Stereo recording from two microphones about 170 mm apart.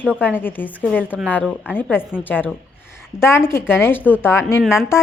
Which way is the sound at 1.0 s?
10° right (ahead or behind).